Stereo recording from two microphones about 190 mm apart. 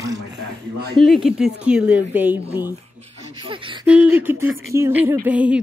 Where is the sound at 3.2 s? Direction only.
30° right (ahead or behind).